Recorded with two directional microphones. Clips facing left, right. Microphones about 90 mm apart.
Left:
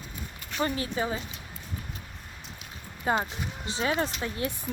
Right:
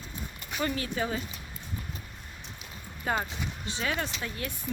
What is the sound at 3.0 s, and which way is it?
Speech, 25° left (ahead or behind).